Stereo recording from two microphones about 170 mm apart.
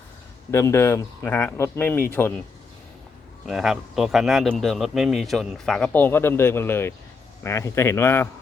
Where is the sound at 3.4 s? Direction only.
Centre (ahead or behind).